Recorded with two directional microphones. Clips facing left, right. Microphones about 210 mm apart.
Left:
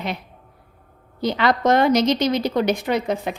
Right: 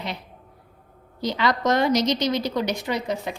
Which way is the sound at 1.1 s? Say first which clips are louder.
Left 4 dB; 55° left (ahead or behind).